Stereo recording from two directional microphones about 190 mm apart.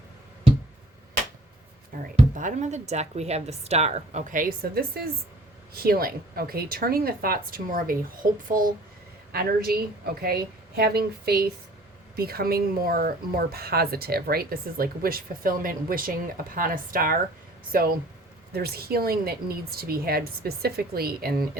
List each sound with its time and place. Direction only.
2.0 s speech: 40° right (ahead or behind)
10.8 s speech: 55° right (ahead or behind)